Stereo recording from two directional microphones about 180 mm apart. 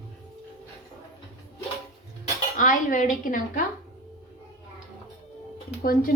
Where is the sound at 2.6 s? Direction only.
45° left (ahead or behind).